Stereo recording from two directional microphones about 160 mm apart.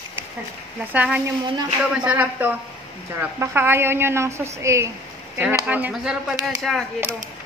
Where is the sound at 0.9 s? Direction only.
10° right (ahead or behind).